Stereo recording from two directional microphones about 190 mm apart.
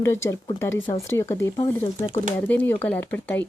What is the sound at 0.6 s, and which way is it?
Speech, 15° left (ahead or behind).